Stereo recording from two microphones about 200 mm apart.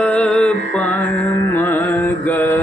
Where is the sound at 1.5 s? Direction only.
10° left (ahead or behind).